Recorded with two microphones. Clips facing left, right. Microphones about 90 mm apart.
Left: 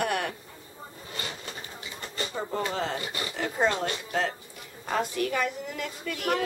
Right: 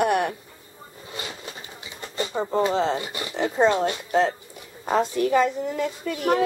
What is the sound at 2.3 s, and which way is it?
A woman's voice, 25° right (ahead or behind).